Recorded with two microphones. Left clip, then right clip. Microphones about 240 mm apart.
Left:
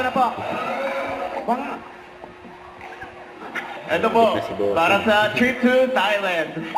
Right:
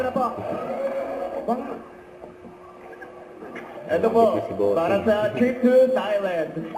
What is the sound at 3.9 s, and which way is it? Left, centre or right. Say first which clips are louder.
A man's voice: left 1 dB; centre.